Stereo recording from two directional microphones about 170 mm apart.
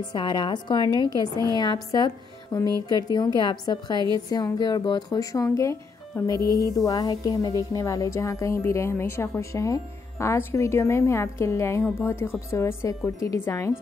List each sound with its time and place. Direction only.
0.1 s a woman's voice: 25° left (ahead or behind)